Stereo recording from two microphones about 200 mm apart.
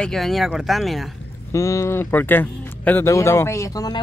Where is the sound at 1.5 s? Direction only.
15° left (ahead or behind).